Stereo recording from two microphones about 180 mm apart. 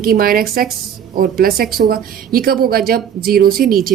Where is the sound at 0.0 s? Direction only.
55° right (ahead or behind).